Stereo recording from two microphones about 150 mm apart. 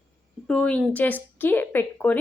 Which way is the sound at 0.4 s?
5° left (ahead or behind).